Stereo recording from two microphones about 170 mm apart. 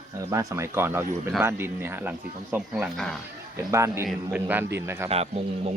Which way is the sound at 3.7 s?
15° right (ahead or behind).